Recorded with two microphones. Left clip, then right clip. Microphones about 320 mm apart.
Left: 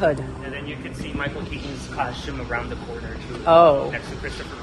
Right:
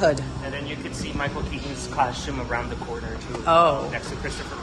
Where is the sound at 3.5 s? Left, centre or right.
Centre.